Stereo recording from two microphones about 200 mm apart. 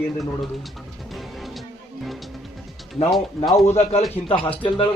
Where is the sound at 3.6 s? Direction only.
30° left (ahead or behind).